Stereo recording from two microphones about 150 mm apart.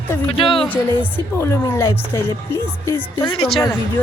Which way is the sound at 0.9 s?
30° right (ahead or behind).